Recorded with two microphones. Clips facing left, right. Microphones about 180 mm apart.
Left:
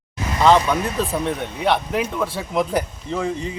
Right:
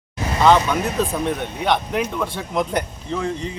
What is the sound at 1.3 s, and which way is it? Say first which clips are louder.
A man's voice: even; centre (ahead or behind).